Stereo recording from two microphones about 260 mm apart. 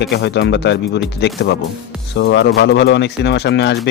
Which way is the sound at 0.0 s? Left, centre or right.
Left.